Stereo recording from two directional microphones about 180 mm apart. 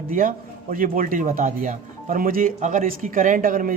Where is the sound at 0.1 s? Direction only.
50° right (ahead or behind).